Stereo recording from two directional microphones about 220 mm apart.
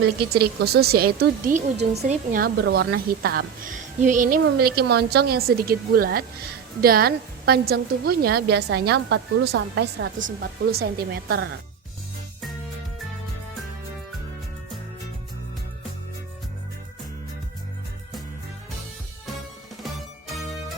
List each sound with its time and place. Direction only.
0.0 s a woman's voice: 45° right (ahead or behind); by 2.0 s 30° right (ahead or behind)
2.0 s a woman's voice: 40° right (ahead or behind)